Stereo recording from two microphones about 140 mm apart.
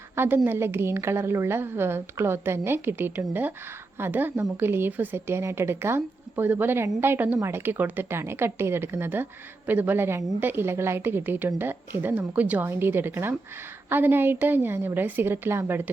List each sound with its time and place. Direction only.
0.2 s a woman's voice: 15° right (ahead or behind)